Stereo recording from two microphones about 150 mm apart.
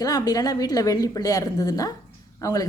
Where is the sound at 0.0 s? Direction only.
25° left (ahead or behind).